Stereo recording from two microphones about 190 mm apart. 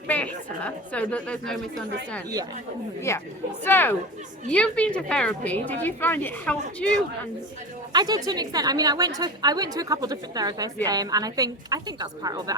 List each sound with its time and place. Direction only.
0.1 s a woman's voice: 5° left (ahead or behind)
3.1 s a woman's voice: 15° left (ahead or behind)
7.9 s a woman's voice: 20° right (ahead or behind)